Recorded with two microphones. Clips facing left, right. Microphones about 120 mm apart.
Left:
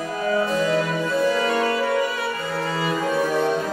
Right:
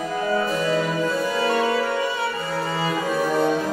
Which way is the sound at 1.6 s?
25° right (ahead or behind).